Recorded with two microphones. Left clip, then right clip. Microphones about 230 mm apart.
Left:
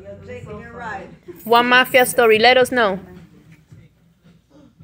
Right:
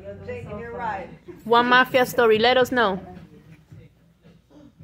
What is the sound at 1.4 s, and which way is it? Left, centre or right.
A woman's voice, centre.